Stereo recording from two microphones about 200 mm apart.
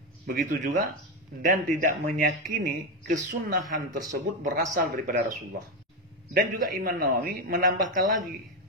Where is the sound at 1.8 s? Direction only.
45° right (ahead or behind).